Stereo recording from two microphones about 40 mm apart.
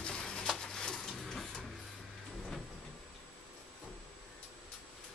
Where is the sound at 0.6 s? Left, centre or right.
Centre.